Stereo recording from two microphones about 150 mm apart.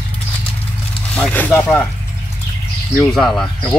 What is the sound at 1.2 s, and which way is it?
Speech, 10° left (ahead or behind).